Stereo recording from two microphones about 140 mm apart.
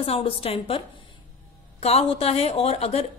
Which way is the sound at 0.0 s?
40° left (ahead or behind).